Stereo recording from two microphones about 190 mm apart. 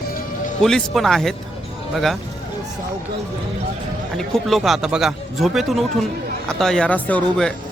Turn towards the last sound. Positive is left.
turn(degrees=5)  # may be behind; listen again after turning